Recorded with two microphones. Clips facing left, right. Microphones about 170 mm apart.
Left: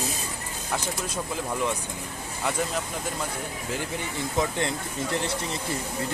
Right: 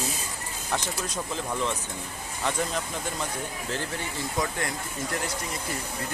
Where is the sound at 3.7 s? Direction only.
15° left (ahead or behind).